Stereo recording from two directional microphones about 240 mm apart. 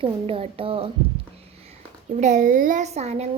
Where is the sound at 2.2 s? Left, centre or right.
Right.